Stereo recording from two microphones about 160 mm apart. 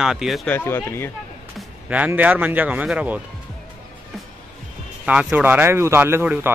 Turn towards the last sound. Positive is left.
turn(degrees=-15)  # may be behind; listen again after turning